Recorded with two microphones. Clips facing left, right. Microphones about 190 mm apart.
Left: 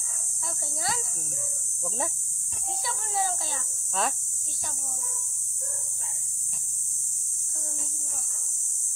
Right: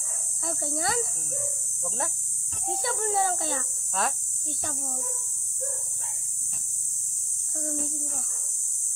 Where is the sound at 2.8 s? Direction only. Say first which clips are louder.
Right 4 dB; 55° right (ahead or behind).